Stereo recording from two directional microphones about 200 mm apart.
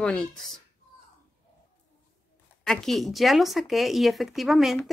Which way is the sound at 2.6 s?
Centre (ahead or behind).